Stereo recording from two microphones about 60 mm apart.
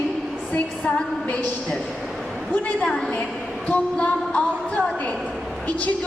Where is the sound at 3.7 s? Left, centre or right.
Left.